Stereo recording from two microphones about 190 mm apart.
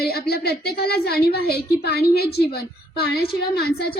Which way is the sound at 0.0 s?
55° left (ahead or behind).